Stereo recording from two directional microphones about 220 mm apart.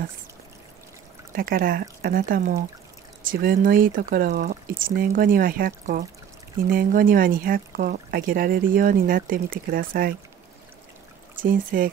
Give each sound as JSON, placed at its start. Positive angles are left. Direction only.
{"t": 1.3, "sound": "speech", "side_deg": -40}
{"t": 11.4, "sound": "speech", "side_deg": -40}